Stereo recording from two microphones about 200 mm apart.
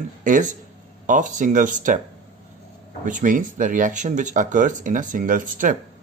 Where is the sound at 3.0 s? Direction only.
40° right (ahead or behind).